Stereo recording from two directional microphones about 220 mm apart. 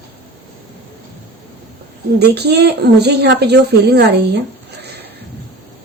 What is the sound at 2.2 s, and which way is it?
Speech, 50° right (ahead or behind).